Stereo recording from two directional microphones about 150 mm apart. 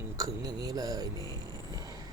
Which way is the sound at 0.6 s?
25° right (ahead or behind).